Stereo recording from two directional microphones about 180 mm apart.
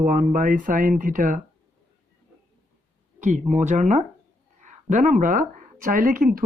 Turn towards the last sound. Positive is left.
turn(degrees=-50)  # may be behind; listen again after turning